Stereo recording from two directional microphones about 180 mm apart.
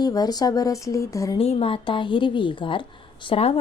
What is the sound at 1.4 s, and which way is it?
A woman's voice, 35° left (ahead or behind).